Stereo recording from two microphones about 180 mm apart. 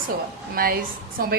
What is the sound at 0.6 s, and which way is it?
Speech, 55° right (ahead or behind).